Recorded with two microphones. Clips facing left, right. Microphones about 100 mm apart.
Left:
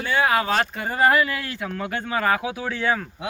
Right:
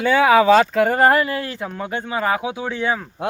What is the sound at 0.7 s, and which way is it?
Speech, 80° right.